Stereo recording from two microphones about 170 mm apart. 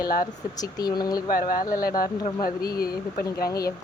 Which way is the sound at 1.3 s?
60° left (ahead or behind).